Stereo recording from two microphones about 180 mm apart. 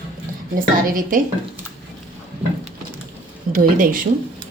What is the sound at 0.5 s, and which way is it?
Speech, 50° right (ahead or behind).